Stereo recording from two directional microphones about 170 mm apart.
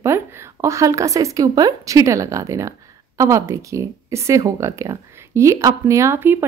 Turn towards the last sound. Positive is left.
turn(degrees=-15)  # may be behind; listen again after turning